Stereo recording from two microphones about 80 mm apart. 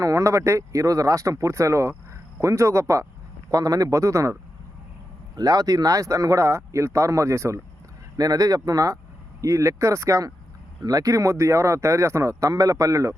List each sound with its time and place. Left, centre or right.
0.0 s speech: right
5.4 s speech: right
8.1 s speech: right